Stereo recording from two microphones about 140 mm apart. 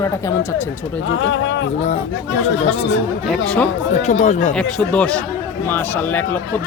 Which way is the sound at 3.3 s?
5° left (ahead or behind).